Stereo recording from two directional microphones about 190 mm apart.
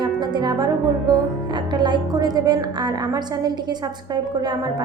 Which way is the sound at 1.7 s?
25° right (ahead or behind).